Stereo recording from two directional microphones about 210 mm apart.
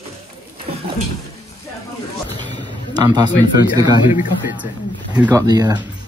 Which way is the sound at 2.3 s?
20° right (ahead or behind).